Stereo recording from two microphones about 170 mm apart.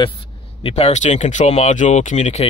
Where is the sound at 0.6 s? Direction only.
40° left (ahead or behind).